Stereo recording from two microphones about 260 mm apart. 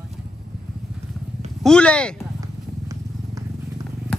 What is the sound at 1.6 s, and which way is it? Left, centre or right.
Speech, centre.